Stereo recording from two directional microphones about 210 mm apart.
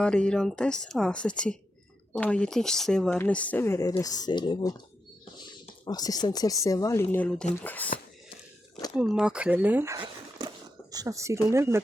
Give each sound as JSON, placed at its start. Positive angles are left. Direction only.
{"t": 0.0, "sound": "speech", "side_deg": 5}
{"t": 5.8, "sound": "speech", "side_deg": 20}
{"t": 9.0, "sound": "speech", "side_deg": -5}